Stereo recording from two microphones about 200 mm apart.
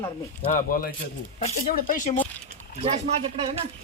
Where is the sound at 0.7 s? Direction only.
45° left (ahead or behind).